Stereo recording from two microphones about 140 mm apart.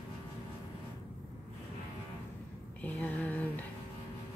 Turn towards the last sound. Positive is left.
turn(degrees=10)  # may be behind; listen again after turning